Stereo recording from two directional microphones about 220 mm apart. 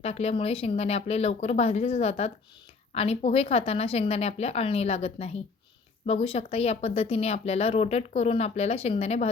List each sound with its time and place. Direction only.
0.0 s speech: 30° left (ahead or behind)